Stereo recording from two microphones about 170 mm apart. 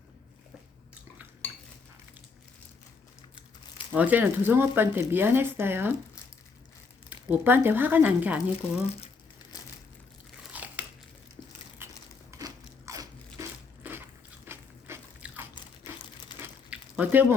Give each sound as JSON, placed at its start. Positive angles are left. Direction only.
{"t": 3.9, "sound": "speech", "side_deg": -10}
{"t": 7.1, "sound": "speech", "side_deg": -10}
{"t": 10.5, "sound": "biting", "side_deg": -10}
{"t": 11.8, "sound": "crumpling", "side_deg": -15}
{"t": 12.4, "sound": "crunch", "side_deg": -20}
{"t": 13.8, "sound": "a sound", "side_deg": -10}